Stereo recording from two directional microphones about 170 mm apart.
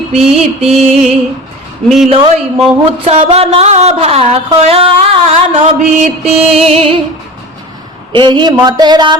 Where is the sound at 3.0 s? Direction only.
35° right (ahead or behind).